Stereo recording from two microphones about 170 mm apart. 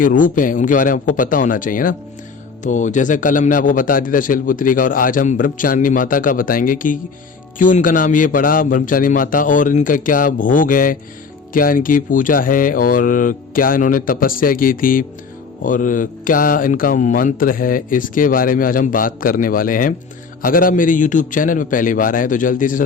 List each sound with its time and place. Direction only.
0.0 s a man's voice: 50° left (ahead or behind)